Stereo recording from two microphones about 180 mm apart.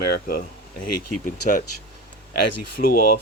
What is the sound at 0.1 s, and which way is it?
Speech, 55° left (ahead or behind).